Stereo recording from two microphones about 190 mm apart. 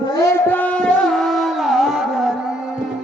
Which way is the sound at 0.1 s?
15° left (ahead or behind).